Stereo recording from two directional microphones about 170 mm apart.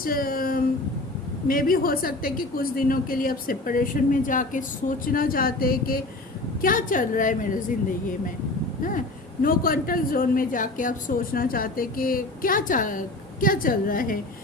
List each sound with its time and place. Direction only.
0.0 s a woman's voice: 60° left (ahead or behind)
8.8 s a woman's voice: 50° left (ahead or behind)